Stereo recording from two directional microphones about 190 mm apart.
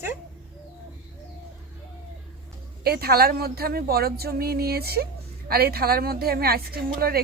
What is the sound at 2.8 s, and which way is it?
A woman's voice, 55° right (ahead or behind).